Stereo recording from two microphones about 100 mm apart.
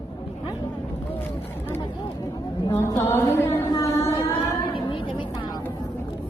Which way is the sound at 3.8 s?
30° left (ahead or behind).